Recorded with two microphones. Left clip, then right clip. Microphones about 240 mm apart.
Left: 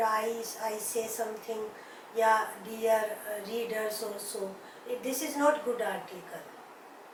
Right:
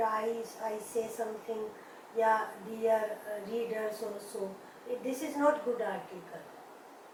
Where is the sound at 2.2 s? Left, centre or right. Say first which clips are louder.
Left 3 dB; centre.